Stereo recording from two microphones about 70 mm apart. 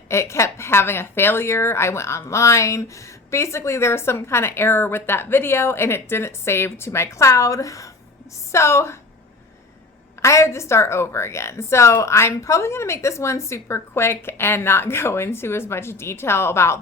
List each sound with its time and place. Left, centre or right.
0.1 s a woman's voice: left
10.2 s a woman's voice: left